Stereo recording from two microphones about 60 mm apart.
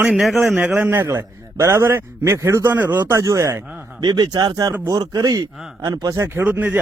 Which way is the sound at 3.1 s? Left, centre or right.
Right.